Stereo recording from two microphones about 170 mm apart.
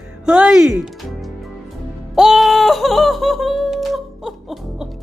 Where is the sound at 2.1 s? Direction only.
Centre (ahead or behind).